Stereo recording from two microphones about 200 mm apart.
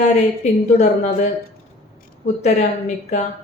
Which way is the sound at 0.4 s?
35° left (ahead or behind).